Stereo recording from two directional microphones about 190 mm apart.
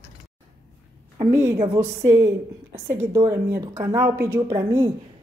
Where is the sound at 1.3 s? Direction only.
15° right (ahead or behind).